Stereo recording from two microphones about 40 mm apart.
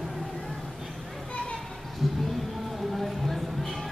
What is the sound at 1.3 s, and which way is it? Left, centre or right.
Children playing, left.